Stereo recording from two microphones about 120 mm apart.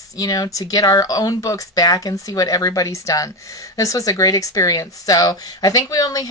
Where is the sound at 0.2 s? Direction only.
30° left (ahead or behind).